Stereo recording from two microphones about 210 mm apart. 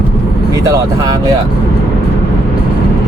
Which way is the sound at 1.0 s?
15° right (ahead or behind).